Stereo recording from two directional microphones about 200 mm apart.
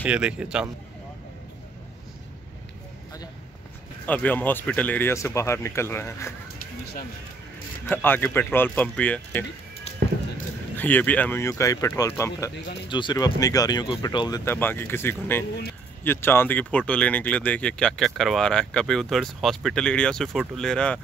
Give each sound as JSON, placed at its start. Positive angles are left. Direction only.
{"t": 0.0, "sound": "speech", "side_deg": -5}
{"t": 4.0, "sound": "speech", "side_deg": 10}
{"t": 7.9, "sound": "speech", "side_deg": 10}
{"t": 9.9, "sound": "music", "side_deg": 30}
{"t": 10.8, "sound": "speech", "side_deg": 10}